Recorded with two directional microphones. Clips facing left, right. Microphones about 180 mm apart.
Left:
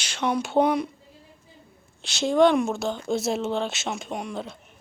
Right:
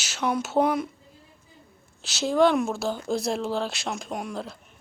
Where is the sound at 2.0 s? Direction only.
5° right (ahead or behind).